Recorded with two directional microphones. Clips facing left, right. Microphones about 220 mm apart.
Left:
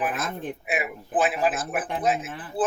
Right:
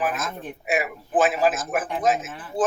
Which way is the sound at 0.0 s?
45° right (ahead or behind).